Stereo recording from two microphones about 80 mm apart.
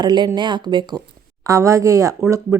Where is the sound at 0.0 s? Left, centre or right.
Right.